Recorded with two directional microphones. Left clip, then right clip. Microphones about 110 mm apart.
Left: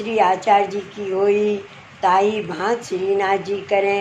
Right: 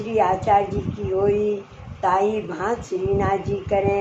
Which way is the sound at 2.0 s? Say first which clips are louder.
Left 3 dB; 45° left (ahead or behind).